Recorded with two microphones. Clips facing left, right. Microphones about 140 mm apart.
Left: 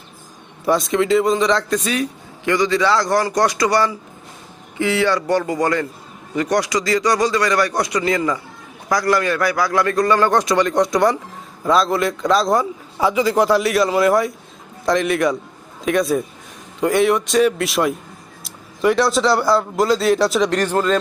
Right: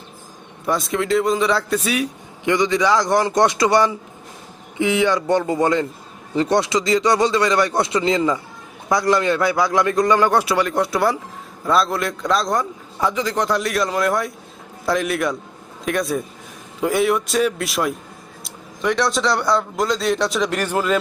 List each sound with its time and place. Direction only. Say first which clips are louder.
0.6 s a man's voice: left 4 dB; centre (ahead or behind)
2.5 s a man's voice: even; 20° right (ahead or behind)